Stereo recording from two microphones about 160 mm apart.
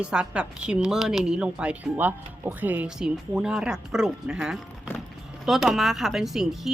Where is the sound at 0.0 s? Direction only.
5° right (ahead or behind).